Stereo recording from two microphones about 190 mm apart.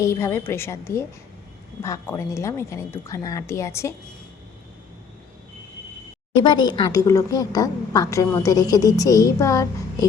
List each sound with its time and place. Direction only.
0.0 s a woman's voice: 15° left (ahead or behind)
6.4 s a woman's voice: 20° left (ahead or behind)